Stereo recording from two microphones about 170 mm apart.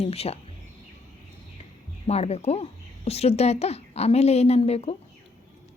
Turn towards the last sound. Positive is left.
turn(degrees=35)  # may be behind; listen again after turning